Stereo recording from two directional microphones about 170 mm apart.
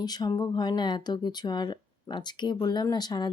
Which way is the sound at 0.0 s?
25° left (ahead or behind).